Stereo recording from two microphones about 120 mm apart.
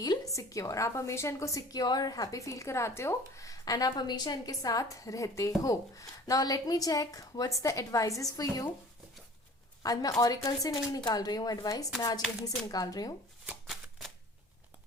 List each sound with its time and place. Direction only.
0.0 s a woman's voice: 30° left (ahead or behind)
9.8 s speech: 30° left (ahead or behind)
13.4 s shuffling cards: 10° right (ahead or behind)